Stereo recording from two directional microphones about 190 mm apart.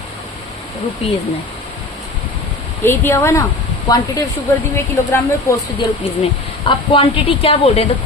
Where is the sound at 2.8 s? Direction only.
10° left (ahead or behind).